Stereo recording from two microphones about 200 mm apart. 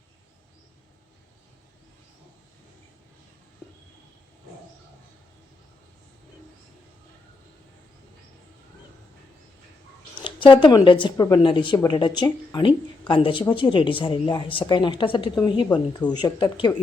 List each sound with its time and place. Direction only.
10.2 s a woman's voice: 25° left (ahead or behind)